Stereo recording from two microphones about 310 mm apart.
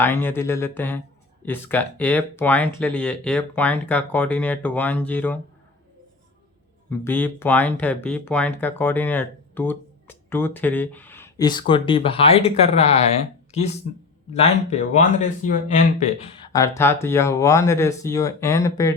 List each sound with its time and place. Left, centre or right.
0.0 s speech: centre
6.9 s speech: centre; by 16.0 s left
16.5 s speech: centre